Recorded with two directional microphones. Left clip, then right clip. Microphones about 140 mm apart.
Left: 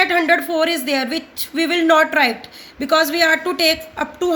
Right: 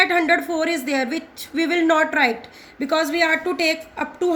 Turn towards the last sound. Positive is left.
turn(degrees=20)  # may be behind; listen again after turning